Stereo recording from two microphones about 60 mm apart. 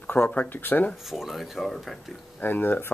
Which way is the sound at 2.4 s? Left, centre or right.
Left.